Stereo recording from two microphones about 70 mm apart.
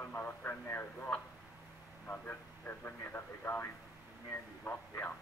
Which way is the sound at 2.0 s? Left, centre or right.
Left.